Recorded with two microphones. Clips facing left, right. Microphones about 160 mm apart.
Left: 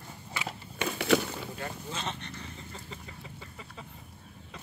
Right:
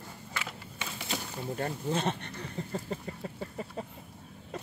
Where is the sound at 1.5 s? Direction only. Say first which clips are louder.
Right 7 dB; 50° right (ahead or behind).